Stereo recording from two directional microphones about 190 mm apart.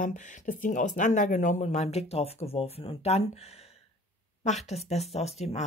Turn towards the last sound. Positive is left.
turn(degrees=35)  # may be behind; listen again after turning